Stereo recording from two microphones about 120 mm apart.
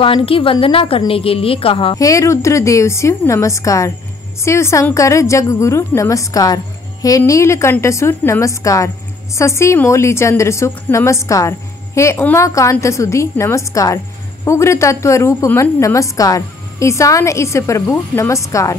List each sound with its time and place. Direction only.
0.0 s a woman's voice: 50° left (ahead or behind)
2.0 s a woman's voice: 25° left (ahead or behind)